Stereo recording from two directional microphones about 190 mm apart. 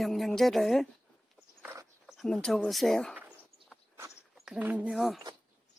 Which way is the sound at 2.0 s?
Centre (ahead or behind).